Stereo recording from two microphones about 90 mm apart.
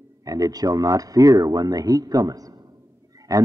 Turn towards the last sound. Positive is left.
turn(degrees=-40)  # may be behind; listen again after turning